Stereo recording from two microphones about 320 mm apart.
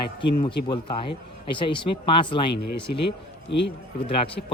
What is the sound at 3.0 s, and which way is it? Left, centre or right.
Speech, left.